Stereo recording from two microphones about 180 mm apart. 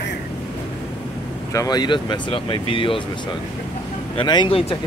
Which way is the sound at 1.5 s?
20° left (ahead or behind).